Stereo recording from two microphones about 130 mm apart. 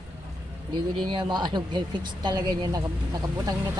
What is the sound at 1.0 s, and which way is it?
Speech, 35° right (ahead or behind).